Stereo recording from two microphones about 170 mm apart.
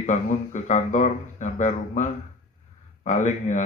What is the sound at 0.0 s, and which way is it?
Speech, 45° left (ahead or behind).